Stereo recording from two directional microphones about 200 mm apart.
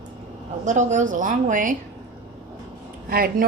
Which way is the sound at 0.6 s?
40° right (ahead or behind).